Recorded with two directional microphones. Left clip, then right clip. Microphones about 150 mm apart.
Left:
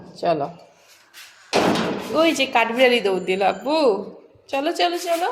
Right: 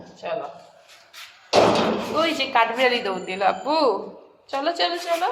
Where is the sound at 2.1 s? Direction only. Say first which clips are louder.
Left 4 dB; 45° left (ahead or behind).